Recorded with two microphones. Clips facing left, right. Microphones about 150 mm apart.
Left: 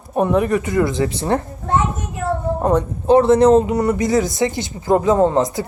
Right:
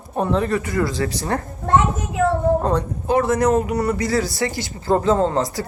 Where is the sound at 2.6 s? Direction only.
20° left (ahead or behind).